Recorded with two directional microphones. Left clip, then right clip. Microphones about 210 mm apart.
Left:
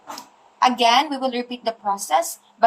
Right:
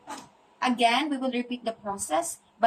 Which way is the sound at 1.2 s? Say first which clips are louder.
Left 6 dB; 25° right (ahead or behind).